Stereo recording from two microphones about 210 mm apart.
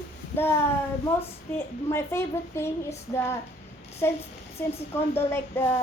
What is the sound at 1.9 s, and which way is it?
A child's voice, 10° left (ahead or behind).